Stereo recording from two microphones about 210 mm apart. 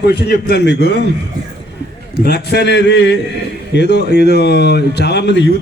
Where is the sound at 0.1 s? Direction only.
50° left (ahead or behind).